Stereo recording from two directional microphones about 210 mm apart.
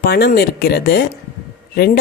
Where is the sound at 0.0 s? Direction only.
45° left (ahead or behind).